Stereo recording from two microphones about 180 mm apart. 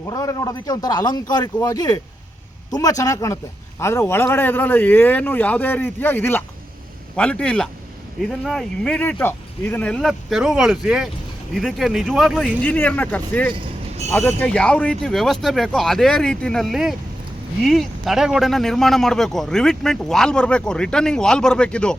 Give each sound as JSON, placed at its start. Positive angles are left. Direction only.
{"t": 0.1, "sound": "a man's voice", "side_deg": 20}
{"t": 3.0, "sound": "a man's voice", "side_deg": 20}